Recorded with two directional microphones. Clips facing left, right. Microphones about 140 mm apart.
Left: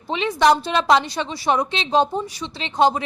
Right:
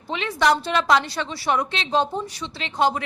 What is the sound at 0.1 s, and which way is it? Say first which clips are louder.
A woman's voice: left 4 dB; 20° left (ahead or behind).